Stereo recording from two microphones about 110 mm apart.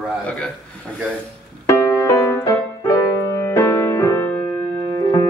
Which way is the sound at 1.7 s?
25° left (ahead or behind).